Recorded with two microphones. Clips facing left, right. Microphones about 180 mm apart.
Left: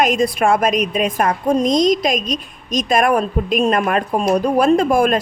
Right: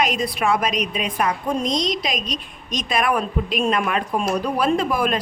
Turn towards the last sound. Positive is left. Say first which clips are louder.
# left 6 dB
turn(degrees=45)  # may be behind; listen again after turning